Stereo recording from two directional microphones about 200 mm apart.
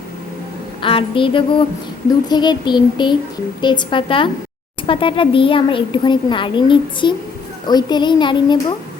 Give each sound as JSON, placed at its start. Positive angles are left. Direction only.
{"t": 0.8, "sound": "a child's voice", "side_deg": 25}